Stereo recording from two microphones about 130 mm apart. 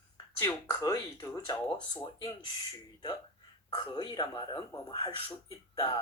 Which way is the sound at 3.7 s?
35° left (ahead or behind).